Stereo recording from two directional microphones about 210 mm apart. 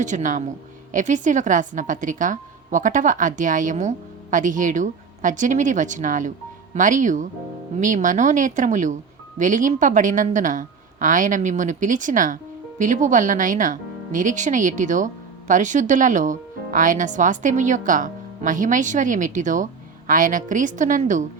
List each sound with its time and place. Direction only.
0.0 s speech: 35° right (ahead or behind)